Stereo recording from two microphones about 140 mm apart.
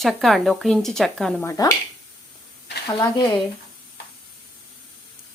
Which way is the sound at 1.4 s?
25° left (ahead or behind).